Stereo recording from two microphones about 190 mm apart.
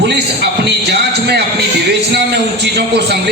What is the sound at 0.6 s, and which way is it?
A man's voice, 60° right (ahead or behind).